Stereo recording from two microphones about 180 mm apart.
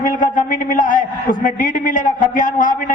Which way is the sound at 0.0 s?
50° left (ahead or behind).